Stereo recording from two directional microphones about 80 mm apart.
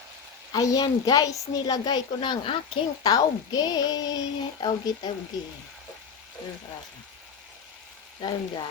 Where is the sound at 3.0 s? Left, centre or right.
Left.